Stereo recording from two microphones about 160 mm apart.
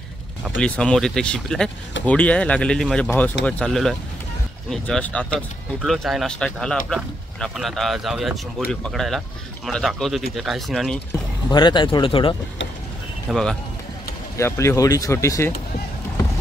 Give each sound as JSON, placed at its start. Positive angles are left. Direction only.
{"t": 0.6, "sound": "speech", "side_deg": 5}
{"t": 11.5, "sound": "speech", "side_deg": 30}
{"t": 13.3, "sound": "speech", "side_deg": 5}
{"t": 14.3, "sound": "speech", "side_deg": 15}